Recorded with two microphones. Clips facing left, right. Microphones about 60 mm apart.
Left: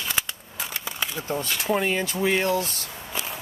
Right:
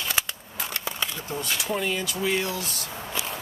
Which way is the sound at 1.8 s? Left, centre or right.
Left.